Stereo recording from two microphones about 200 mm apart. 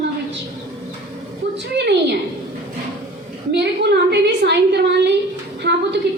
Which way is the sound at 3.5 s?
55° right (ahead or behind).